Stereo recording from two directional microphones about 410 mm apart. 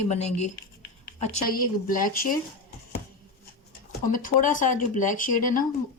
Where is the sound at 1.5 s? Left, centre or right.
Left.